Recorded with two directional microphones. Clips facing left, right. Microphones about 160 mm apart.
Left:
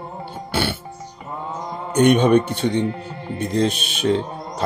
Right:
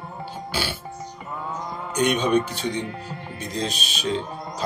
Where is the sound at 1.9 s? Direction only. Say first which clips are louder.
Left 6 dB; 55° left (ahead or behind).